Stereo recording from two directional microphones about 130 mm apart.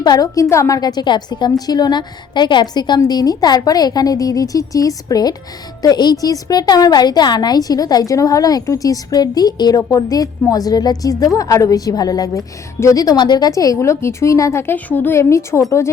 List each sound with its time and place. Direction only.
0.0 s a woman's voice: 30° left (ahead or behind)